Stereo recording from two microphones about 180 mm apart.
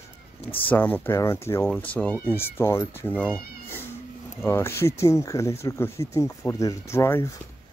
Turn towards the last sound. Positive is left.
turn(degrees=15)  # may be behind; listen again after turning